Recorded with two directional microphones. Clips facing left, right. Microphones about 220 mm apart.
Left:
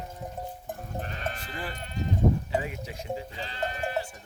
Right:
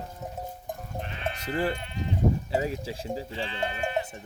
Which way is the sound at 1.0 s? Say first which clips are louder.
Right 2 dB; 40° left (ahead or behind).